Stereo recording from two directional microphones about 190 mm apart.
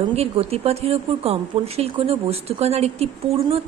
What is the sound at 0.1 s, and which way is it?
A woman's voice, 30° right (ahead or behind).